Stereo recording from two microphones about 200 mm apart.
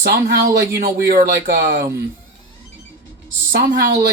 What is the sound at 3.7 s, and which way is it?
Speech, 45° right (ahead or behind).